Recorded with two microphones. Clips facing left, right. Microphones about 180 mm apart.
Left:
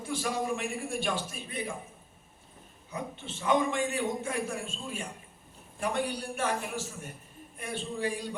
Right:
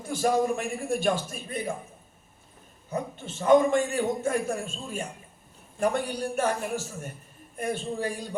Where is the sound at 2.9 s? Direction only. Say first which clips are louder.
Right 6 dB; 45° right (ahead or behind).